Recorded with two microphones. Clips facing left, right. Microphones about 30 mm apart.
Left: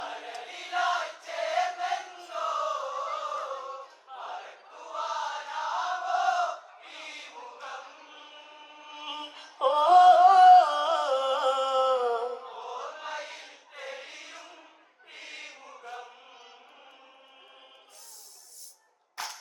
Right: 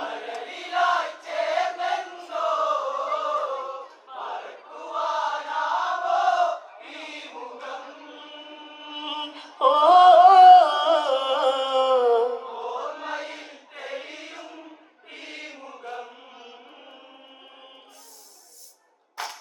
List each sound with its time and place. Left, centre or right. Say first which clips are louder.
0.0 s choir: right 6 dB; right
0.4 s chant: right 5 dB; right
0.7 s choir: right 6 dB; right
4.2 s battle cry: right 6 dB; right
4.7 s chant: right 7 dB; right
4.9 s choir: right 7 dB; right
6.1 s crowd: right 6 dB; right
7.6 s chant: right 5 dB; right